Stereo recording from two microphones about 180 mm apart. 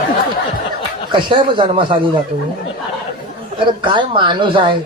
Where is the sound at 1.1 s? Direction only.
25° right (ahead or behind).